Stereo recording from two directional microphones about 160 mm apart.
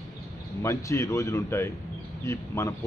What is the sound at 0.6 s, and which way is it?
A man's voice, 20° left (ahead or behind).